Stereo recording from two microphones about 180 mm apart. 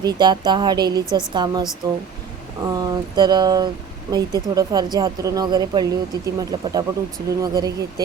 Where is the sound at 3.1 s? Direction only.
25° right (ahead or behind).